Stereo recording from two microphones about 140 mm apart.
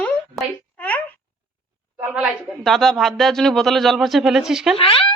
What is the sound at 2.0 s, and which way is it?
Speech, 10° right (ahead or behind).